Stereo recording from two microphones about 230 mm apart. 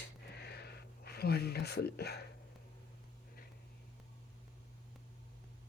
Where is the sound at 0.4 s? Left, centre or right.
Left.